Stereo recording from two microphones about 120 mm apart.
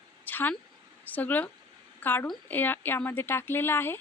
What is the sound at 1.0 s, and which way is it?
A woman's voice, 15° left (ahead or behind).